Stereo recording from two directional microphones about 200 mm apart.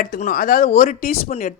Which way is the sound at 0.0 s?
40° left (ahead or behind).